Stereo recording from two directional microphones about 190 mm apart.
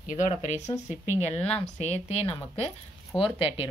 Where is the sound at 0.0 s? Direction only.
40° left (ahead or behind).